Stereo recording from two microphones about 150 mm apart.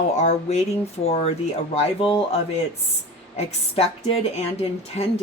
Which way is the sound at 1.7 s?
40° left (ahead or behind).